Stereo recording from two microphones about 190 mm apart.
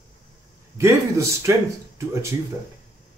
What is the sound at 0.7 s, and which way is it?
Speech, 15° right (ahead or behind).